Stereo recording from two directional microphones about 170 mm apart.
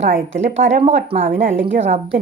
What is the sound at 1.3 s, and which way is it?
Speech, 90° right.